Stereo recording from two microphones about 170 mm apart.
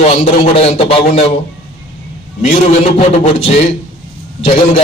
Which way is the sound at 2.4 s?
40° left (ahead or behind).